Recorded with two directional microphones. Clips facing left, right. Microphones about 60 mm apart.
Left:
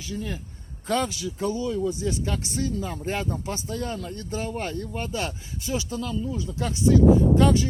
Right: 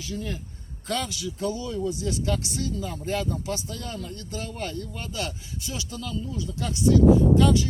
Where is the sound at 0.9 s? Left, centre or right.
Left.